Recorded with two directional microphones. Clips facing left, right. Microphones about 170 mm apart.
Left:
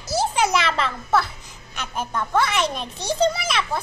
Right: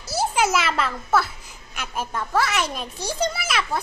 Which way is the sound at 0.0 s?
5° right (ahead or behind).